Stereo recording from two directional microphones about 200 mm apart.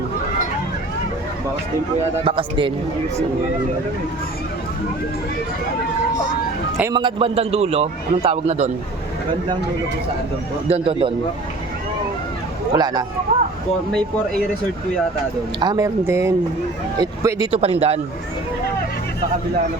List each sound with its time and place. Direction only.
2.2 s a man's voice: 25° right (ahead or behind)
6.9 s a man's voice: 25° right (ahead or behind)
10.7 s a man's voice: 30° right (ahead or behind)
12.7 s a man's voice: 20° right (ahead or behind)
15.6 s speech: 15° right (ahead or behind)
17.5 s a man's voice: 30° right (ahead or behind)